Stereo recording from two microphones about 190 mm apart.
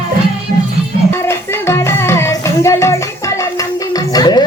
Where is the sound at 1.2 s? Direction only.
15° left (ahead or behind).